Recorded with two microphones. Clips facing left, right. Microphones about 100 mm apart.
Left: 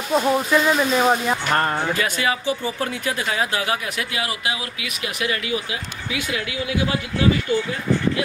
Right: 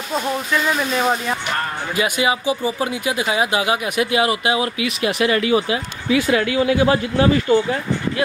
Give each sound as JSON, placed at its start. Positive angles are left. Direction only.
{"t": 0.1, "sound": "speech", "side_deg": 10}
{"t": 2.0, "sound": "speech", "side_deg": -10}